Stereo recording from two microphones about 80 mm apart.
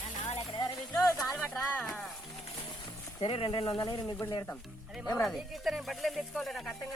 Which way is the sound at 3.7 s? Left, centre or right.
Left.